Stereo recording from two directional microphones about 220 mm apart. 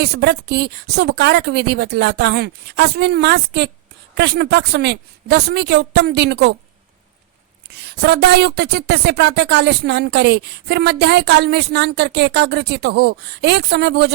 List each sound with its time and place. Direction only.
0.0 s a woman's voice: 50° right (ahead or behind)
7.7 s a woman's voice: 50° right (ahead or behind)